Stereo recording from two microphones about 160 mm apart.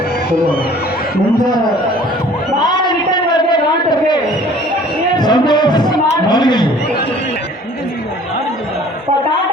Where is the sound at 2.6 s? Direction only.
25° left (ahead or behind).